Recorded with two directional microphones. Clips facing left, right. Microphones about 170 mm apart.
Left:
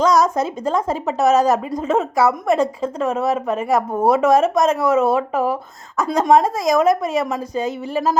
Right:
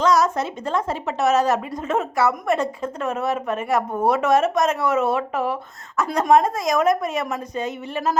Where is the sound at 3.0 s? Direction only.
30° left (ahead or behind).